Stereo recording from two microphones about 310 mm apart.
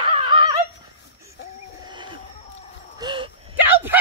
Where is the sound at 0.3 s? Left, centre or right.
Centre.